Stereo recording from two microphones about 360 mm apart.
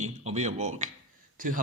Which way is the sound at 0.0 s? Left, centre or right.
Centre.